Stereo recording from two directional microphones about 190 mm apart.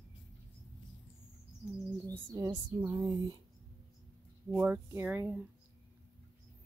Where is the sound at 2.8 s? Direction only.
15° right (ahead or behind).